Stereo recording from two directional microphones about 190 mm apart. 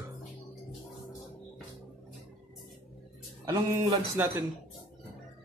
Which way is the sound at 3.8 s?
15° right (ahead or behind).